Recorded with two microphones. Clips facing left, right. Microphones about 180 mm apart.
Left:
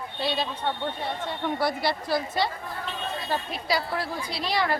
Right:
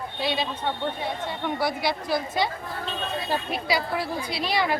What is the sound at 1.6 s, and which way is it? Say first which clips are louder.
Speech: right 1 dB; 15° right (ahead or behind).